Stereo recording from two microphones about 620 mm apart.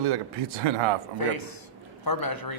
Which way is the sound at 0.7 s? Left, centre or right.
Right.